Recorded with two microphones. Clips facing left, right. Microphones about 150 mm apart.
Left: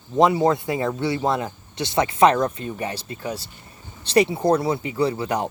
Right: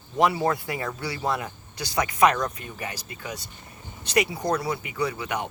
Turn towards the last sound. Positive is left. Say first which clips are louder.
# left 6 dB
turn(degrees=35)  # may be behind; listen again after turning